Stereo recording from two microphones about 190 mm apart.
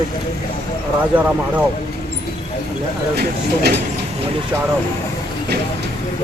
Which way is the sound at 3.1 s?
55° right (ahead or behind).